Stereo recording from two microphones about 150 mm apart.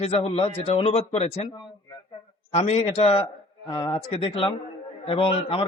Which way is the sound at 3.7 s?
30° left (ahead or behind).